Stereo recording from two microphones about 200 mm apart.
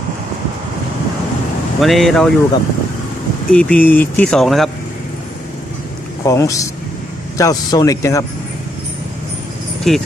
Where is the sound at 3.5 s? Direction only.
5° left (ahead or behind).